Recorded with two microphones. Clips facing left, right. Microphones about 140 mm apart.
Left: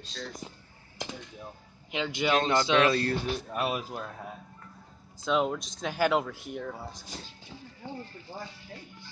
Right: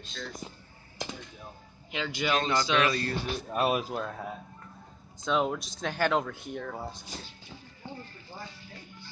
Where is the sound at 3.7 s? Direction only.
80° right.